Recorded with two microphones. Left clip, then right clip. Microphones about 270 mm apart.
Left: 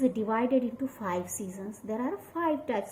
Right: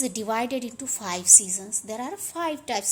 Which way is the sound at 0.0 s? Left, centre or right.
Right.